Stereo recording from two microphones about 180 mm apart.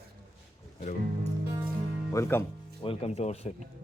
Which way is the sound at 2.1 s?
15° left (ahead or behind).